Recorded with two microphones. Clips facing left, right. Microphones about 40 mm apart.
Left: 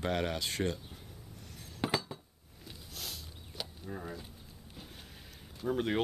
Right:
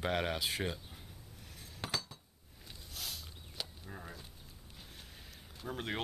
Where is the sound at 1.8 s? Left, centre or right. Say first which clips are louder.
Left 7 dB; centre.